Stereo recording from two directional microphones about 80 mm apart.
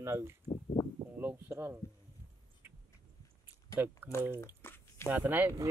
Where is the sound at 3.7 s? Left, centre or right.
Right.